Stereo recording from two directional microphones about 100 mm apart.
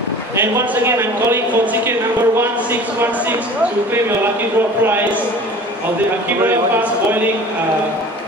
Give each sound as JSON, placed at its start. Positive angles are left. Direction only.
{"t": 0.4, "sound": "a man's voice", "side_deg": -25}
{"t": 6.4, "sound": "a man's voice", "side_deg": -20}